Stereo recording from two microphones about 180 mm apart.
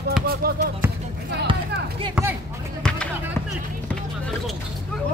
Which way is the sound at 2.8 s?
5° left (ahead or behind).